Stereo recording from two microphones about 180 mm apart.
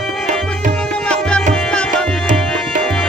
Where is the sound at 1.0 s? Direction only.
5° left (ahead or behind).